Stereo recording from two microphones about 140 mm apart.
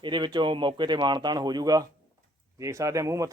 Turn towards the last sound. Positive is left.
turn(degrees=-25)  # may be behind; listen again after turning